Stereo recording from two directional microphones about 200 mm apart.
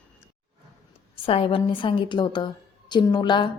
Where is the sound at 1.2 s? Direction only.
25° left (ahead or behind).